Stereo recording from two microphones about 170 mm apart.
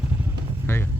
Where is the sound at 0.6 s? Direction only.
15° left (ahead or behind).